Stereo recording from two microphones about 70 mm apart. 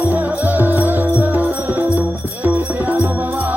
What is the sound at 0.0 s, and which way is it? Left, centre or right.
Music, right.